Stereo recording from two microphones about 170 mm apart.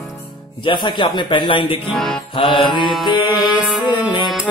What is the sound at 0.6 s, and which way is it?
Speech, 25° left (ahead or behind).